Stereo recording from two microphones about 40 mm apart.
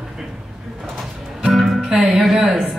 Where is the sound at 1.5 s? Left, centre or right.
Centre.